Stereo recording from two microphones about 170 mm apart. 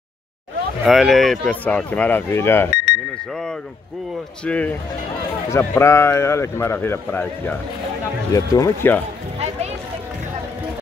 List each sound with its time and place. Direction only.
0.8 s speech: centre (ahead or behind)
4.5 s speech: 10° left (ahead or behind)